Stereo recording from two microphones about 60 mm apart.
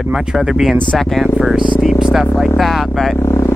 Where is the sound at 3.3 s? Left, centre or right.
Left.